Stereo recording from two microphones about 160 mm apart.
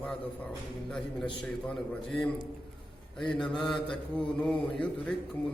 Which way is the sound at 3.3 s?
Centre (ahead or behind).